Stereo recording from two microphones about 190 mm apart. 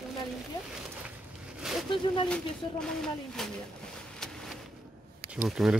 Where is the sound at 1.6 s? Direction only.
Centre (ahead or behind).